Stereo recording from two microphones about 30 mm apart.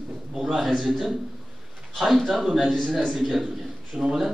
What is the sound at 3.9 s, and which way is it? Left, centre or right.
Speech, centre.